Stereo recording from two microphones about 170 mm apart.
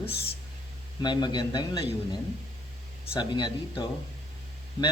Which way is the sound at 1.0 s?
25° left (ahead or behind).